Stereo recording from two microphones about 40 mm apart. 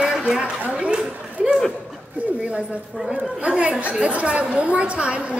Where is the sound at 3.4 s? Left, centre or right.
Right.